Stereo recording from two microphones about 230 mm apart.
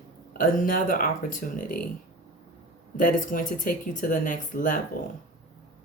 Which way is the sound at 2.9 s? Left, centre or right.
Left.